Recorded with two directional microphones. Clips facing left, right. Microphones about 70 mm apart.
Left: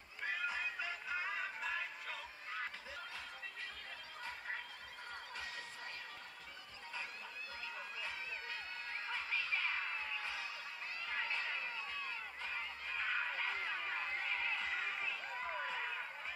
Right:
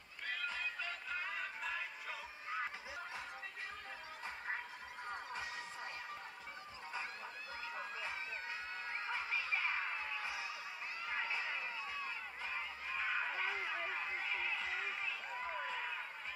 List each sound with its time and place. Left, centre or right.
0.2 s music: centre
5.1 s music: right
7.6 s music: right
11.1 s honk: centre